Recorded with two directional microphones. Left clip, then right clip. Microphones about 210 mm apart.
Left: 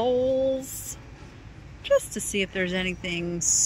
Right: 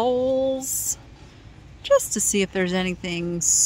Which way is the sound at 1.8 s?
25° right (ahead or behind).